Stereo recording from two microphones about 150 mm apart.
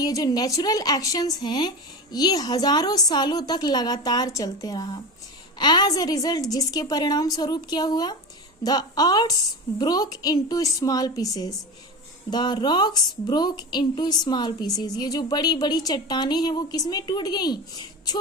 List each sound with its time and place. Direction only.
0.0 s speech: 25° left (ahead or behind)